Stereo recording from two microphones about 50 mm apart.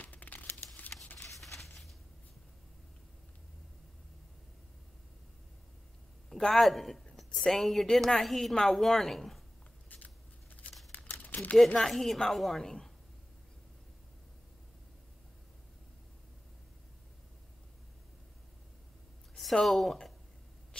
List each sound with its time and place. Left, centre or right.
0.0 s crumpling: left
0.9 s a sound: left
1.4 s a sound: centre
6.3 s a woman's voice: centre
9.8 s scissors: left
10.9 s crumpling: left
11.8 s a woman's voice: centre
19.6 s a woman's voice: centre